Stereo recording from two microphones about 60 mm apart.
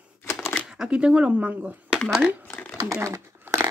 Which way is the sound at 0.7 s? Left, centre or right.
Centre.